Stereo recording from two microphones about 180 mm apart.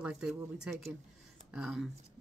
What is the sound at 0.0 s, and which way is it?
Speech, 5° right (ahead or behind).